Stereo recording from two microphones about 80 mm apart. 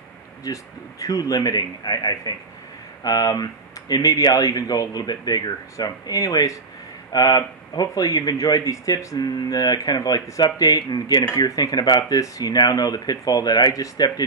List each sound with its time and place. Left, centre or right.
0.4 s speech: left